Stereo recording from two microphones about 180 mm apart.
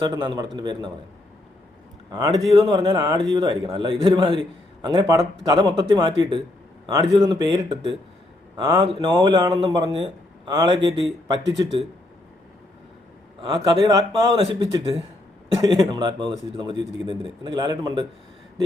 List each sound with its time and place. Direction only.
0.1 s a man's voice: 25° right (ahead or behind)
2.0 s a man's voice: 25° right (ahead or behind)
10.8 s speech: 80° right
13.4 s a man's voice: 25° right (ahead or behind)